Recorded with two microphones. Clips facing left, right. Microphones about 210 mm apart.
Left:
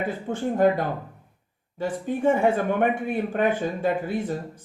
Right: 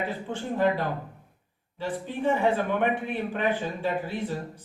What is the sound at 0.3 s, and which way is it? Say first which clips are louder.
Speech: left 5 dB; 45° left (ahead or behind).